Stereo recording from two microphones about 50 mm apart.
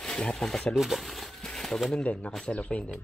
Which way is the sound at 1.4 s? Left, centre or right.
Centre.